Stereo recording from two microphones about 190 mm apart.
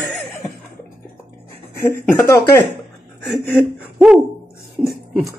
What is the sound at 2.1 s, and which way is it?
Speech, 15° left (ahead or behind).